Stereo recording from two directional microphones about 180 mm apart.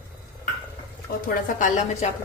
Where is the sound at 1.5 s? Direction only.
45° left (ahead or behind).